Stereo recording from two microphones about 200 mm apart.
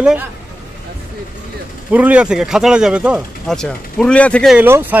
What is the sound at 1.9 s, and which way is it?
Speech, 5° right (ahead or behind).